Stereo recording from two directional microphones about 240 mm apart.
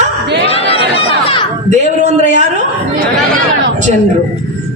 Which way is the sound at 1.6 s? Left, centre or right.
Right.